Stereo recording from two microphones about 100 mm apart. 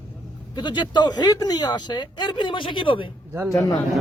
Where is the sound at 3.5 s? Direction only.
35° left (ahead or behind).